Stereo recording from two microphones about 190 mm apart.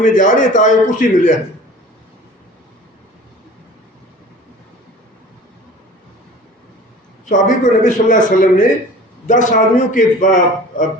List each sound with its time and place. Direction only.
0.0 s a man's voice: 40° left (ahead or behind)
7.3 s a man's voice: 40° left (ahead or behind)